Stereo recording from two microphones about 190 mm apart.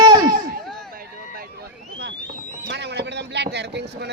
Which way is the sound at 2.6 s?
65° right (ahead or behind).